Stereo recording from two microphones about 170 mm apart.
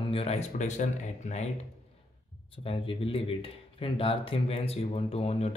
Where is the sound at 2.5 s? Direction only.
35° left (ahead or behind).